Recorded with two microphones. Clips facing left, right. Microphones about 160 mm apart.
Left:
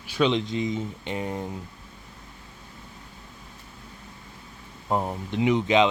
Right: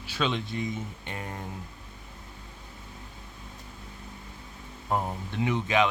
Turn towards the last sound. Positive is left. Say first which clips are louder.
# left 5 dB
turn(degrees=20)  # may be behind; listen again after turning